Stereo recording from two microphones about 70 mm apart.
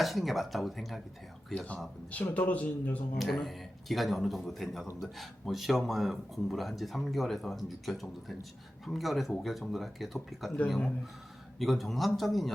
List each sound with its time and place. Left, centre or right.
0.0 s speech: centre
2.0 s speech: left
3.2 s speech: centre
11.6 s speech: centre